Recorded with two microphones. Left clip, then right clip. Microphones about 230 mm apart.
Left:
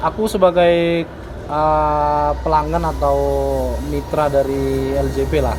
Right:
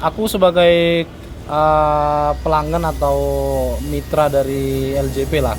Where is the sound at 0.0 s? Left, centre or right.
Right.